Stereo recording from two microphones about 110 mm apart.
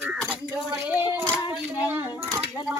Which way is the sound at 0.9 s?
15° right (ahead or behind).